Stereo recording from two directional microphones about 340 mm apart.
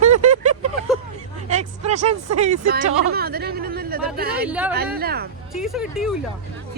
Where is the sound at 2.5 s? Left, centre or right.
Right.